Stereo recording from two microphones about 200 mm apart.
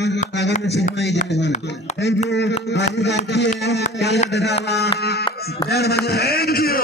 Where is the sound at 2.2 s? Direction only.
60° left (ahead or behind).